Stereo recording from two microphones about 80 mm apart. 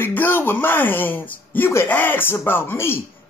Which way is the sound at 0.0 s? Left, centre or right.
Left.